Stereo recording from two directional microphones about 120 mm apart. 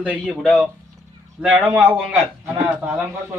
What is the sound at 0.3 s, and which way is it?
Speech, 5° left (ahead or behind).